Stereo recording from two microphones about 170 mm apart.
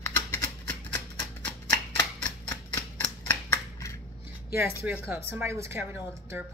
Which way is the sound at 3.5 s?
15° left (ahead or behind).